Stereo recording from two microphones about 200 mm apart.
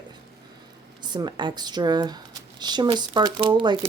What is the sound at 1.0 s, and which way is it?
Speech, 20° right (ahead or behind).